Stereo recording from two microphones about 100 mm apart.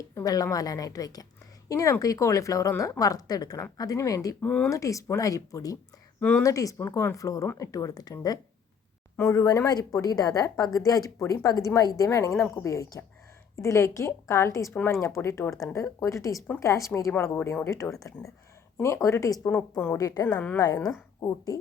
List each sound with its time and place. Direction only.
0.1 s a sound: 35° left (ahead or behind)
0.5 s speech: 35° left (ahead or behind)
4.4 s speech: 10° left (ahead or behind)
4.7 s speech: 35° left (ahead or behind)
6.1 s speech: 15° left (ahead or behind)
6.4 s a woman's voice: 35° left (ahead or behind)
19.5 s a woman's voice: 20° left (ahead or behind)
20.0 s speech: 40° left (ahead or behind)